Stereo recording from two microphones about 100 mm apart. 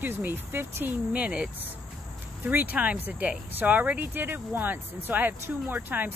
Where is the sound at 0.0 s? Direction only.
20° right (ahead or behind).